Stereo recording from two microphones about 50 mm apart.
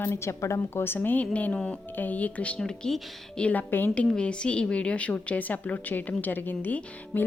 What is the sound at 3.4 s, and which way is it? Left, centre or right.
Speech, left.